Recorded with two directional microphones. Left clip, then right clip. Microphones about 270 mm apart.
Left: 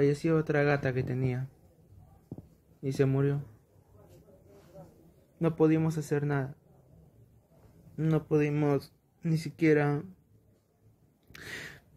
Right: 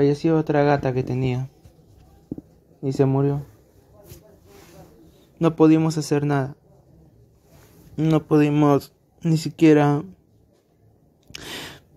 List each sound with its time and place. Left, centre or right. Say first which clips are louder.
0.0 s speech: right 8 dB; centre
2.8 s speech: right 8 dB; centre
5.4 s speech: right 10 dB; centre
7.9 s speech: right 10 dB; centre
11.3 s a sound: right 8 dB; centre